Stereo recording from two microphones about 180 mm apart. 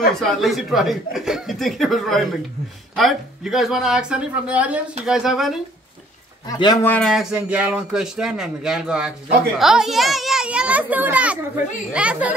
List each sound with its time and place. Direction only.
0.1 s a woman's voice: centre (ahead or behind)
6.4 s a man's voice: 20° left (ahead or behind)
6.9 s a woman's voice: centre (ahead or behind)